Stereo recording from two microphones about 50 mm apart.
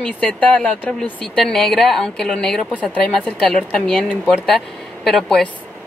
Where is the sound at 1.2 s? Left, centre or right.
Centre.